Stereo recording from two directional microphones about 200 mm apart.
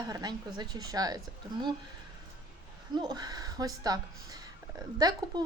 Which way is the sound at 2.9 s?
20° right (ahead or behind).